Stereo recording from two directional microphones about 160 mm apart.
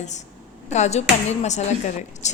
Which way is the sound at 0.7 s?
45° left (ahead or behind).